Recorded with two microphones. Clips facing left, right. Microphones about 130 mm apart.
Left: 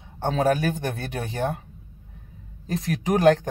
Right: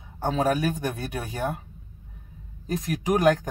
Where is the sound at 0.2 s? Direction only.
30° left (ahead or behind).